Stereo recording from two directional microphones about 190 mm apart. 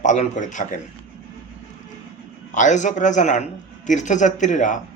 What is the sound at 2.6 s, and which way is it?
Speech, 40° left (ahead or behind).